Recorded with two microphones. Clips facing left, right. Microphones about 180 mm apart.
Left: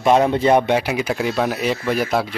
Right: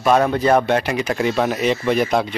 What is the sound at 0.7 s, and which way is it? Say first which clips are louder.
Speech: even; 5° left (ahead or behind).